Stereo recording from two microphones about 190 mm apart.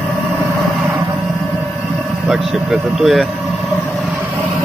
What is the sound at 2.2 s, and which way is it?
Speech, centre (ahead or behind).